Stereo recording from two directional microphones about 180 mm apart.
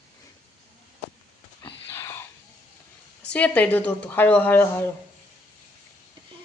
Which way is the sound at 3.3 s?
5° left (ahead or behind).